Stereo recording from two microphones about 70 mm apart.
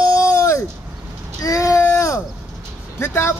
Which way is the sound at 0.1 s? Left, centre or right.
Left.